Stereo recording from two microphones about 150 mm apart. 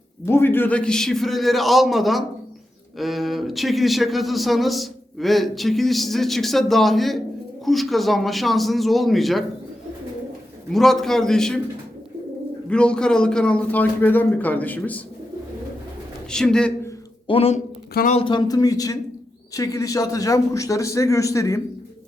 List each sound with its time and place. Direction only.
0.3 s a man's voice: 15° left (ahead or behind)
10.7 s a man's voice: centre (ahead or behind)
12.6 s a man's voice: 5° left (ahead or behind)
16.3 s a man's voice: 5° left (ahead or behind)
17.2 s a man's voice: 40° left (ahead or behind); by 21.6 s 20° left (ahead or behind)